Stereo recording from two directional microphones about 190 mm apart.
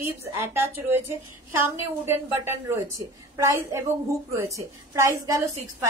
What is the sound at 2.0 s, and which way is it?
Speech, 10° right (ahead or behind).